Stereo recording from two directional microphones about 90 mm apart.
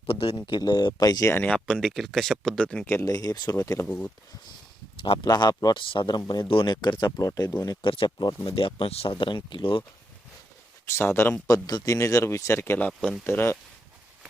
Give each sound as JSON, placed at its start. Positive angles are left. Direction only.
{"t": 0.1, "sound": "speech", "side_deg": 90}
{"t": 0.4, "sound": "speech", "side_deg": 50}
{"t": 1.2, "sound": "speech", "side_deg": 30}
{"t": 1.5, "sound": "speech", "side_deg": 5}
{"t": 2.8, "sound": "speech", "side_deg": 25}
{"t": 3.1, "sound": "speech", "side_deg": 45}
{"t": 3.8, "sound": "speech", "side_deg": 20}
{"t": 5.2, "sound": "speech", "side_deg": 50}
{"t": 5.7, "sound": "speech", "side_deg": 70}
{"t": 6.5, "sound": "speech", "side_deg": 65}
{"t": 7.8, "sound": "speech", "side_deg": 70}
{"t": 8.4, "sound": "speech", "side_deg": 80}
{"t": 10.8, "sound": "speech", "side_deg": 30}
{"t": 11.4, "sound": "speech", "side_deg": 40}